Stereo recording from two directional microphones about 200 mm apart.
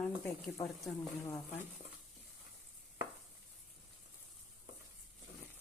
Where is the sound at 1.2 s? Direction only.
15° left (ahead or behind).